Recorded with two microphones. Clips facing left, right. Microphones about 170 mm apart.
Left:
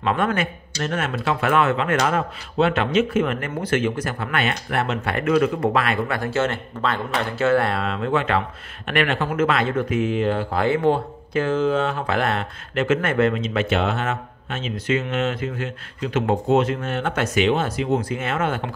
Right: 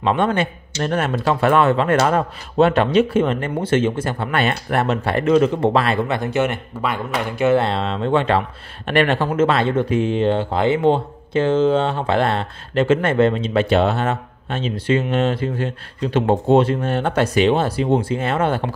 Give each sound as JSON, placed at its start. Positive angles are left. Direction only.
{"t": 0.0, "sound": "speech", "side_deg": -30}